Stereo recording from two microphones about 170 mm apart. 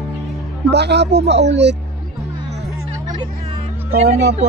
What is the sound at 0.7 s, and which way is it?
Speech, 80° right.